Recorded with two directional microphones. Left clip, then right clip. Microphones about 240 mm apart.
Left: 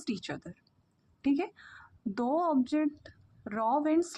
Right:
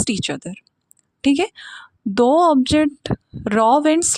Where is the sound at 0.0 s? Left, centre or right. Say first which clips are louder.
Right 15 dB; right.